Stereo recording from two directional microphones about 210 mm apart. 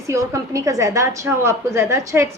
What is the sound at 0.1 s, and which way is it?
A woman's voice, 15° right (ahead or behind).